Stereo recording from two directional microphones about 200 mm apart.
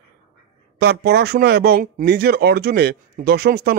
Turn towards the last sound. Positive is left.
turn(degrees=-55)  # may be behind; listen again after turning